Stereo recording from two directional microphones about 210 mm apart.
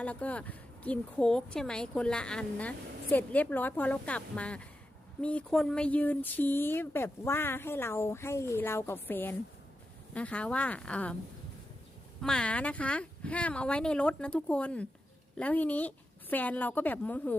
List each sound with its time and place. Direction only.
0.0 s speech: 5° left (ahead or behind)
12.2 s speech: 5° left (ahead or behind)